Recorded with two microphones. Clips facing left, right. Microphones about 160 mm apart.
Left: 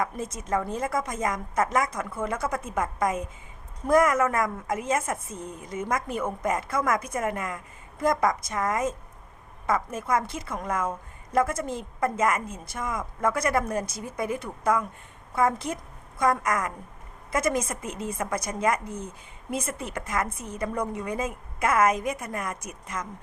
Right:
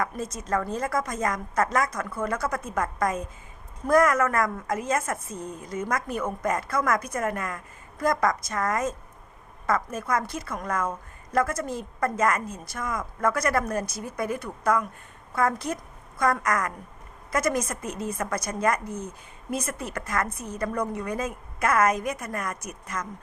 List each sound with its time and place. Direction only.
0.0 s a woman's voice: 20° left (ahead or behind)